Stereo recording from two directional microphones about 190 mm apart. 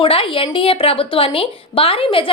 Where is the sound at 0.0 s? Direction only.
30° left (ahead or behind).